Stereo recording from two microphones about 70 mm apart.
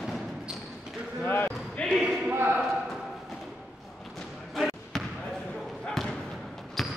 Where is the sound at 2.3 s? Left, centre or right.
Right.